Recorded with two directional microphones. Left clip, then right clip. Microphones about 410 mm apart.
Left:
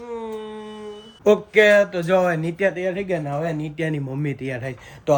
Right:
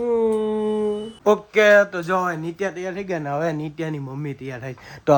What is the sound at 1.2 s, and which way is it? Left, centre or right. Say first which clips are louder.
Speech: left 1 dB; centre.